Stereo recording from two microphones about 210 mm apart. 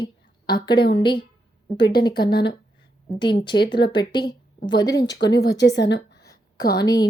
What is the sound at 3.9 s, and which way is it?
A woman's voice, 20° left (ahead or behind).